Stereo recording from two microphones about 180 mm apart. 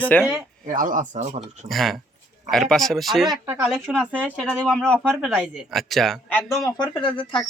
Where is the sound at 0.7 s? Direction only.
50° right (ahead or behind).